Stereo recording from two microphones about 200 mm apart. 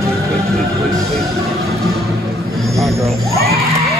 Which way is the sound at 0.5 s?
Centre (ahead or behind).